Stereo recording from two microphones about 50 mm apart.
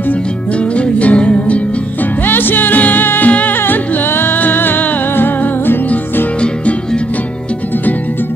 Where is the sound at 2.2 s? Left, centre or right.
Left.